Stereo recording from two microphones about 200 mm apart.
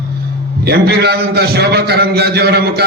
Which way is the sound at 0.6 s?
55° right (ahead or behind).